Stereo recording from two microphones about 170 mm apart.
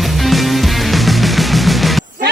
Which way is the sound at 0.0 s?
Centre (ahead or behind).